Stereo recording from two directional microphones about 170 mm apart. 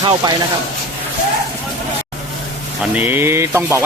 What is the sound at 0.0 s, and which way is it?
Speech, 25° right (ahead or behind).